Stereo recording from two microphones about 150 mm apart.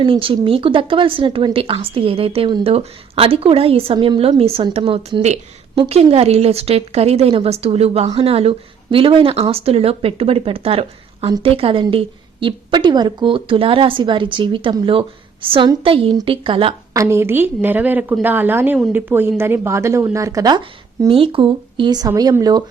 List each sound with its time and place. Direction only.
0.0 s speech: 35° right (ahead or behind)
16.9 s a woman's voice: 20° right (ahead or behind)